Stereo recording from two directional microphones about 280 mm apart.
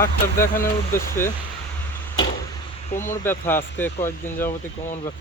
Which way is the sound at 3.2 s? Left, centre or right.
Centre.